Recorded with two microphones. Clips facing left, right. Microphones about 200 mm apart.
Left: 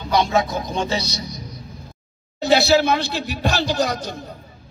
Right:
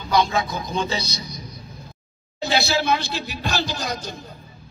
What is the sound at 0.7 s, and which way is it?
Speech, 65° left (ahead or behind).